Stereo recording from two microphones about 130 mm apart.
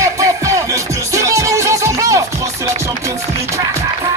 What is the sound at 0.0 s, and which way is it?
Music, 25° right (ahead or behind).